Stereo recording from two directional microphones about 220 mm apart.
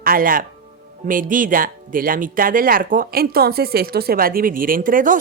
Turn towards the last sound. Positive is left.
turn(degrees=-40)  # may be behind; listen again after turning